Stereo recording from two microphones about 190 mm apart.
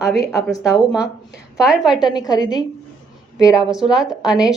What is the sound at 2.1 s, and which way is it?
Speech, 20° left (ahead or behind).